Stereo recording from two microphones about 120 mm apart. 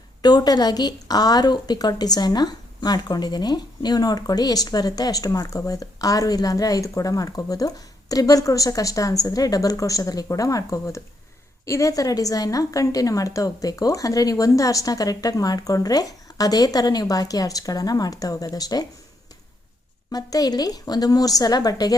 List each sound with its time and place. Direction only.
0.2 s a woman's voice: 35° left (ahead or behind)
20.1 s a woman's voice: 30° left (ahead or behind)